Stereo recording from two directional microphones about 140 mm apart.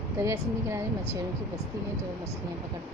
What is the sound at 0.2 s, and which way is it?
Speech, 20° right (ahead or behind).